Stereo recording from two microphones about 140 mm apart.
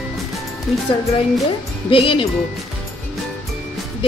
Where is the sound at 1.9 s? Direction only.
40° left (ahead or behind).